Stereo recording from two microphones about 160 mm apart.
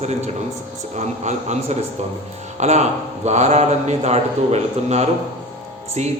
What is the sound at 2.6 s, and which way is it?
A man's voice, 45° right (ahead or behind).